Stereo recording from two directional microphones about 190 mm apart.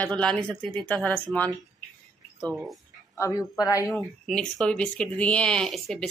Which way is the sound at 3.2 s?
15° left (ahead or behind).